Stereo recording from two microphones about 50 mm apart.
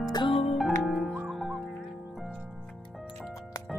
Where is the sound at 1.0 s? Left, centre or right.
Centre.